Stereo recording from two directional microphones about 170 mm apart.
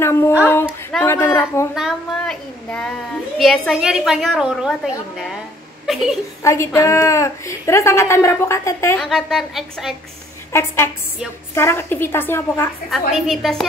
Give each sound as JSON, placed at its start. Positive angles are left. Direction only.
{"t": 0.9, "sound": "a woman's voice", "side_deg": 15}
{"t": 1.8, "sound": "child singing", "side_deg": 5}
{"t": 3.3, "sound": "a woman's voice", "side_deg": 0}
{"t": 6.4, "sound": "a woman's voice", "side_deg": 15}
{"t": 9.0, "sound": "a woman's voice", "side_deg": 0}
{"t": 10.5, "sound": "a woman's voice", "side_deg": 15}
{"t": 12.9, "sound": "a woman's voice", "side_deg": 0}